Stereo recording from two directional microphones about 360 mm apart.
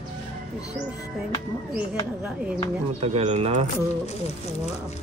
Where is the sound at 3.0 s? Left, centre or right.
Centre.